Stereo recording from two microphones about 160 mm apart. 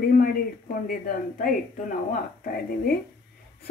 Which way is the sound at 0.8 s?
60° left (ahead or behind).